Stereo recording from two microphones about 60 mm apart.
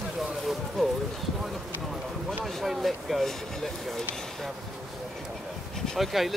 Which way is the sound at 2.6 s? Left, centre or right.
Centre.